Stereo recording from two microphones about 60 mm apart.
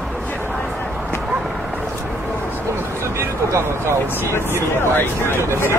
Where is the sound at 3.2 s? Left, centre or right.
Right.